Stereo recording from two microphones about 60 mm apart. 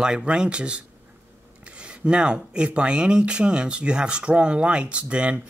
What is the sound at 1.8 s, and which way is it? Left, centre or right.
Speech, centre.